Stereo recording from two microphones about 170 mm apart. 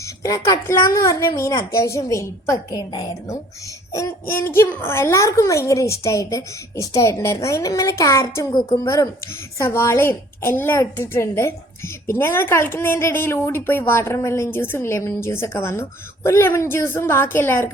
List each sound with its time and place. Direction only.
0.0 s a woman's voice: 20° left (ahead or behind)